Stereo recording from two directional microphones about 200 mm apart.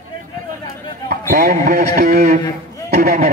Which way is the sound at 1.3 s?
45° right (ahead or behind).